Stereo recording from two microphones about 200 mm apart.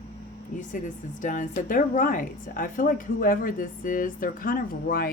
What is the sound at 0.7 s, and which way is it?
A woman's voice, 40° left (ahead or behind).